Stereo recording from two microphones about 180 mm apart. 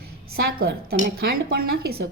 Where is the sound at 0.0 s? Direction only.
60° right (ahead or behind).